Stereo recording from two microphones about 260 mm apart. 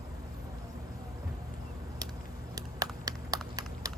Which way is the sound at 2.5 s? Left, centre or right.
Centre.